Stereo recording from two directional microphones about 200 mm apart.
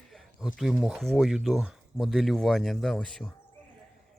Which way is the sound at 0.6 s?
Centre (ahead or behind).